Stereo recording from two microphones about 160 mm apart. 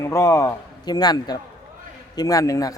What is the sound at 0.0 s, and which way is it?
A man's voice, 20° left (ahead or behind).